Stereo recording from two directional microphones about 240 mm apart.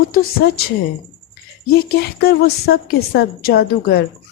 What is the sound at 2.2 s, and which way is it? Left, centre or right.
A woman's voice, left.